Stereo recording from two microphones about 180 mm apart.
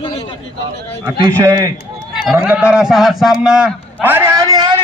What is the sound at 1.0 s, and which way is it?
Speech, 15° right (ahead or behind).